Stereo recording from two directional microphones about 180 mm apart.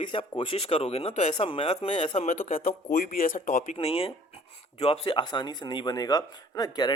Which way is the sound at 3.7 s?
30° left (ahead or behind).